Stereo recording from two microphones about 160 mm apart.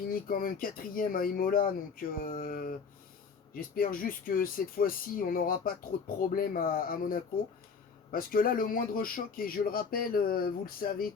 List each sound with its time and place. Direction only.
0.1 s speech: 60° left (ahead or behind)